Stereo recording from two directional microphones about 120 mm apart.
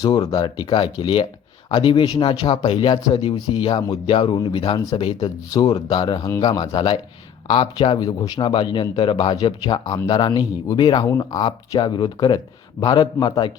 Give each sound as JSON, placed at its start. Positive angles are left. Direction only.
{"t": 0.3, "sound": "speech", "side_deg": 40}
{"t": 6.2, "sound": "speech", "side_deg": 25}
{"t": 6.7, "sound": "speech", "side_deg": 45}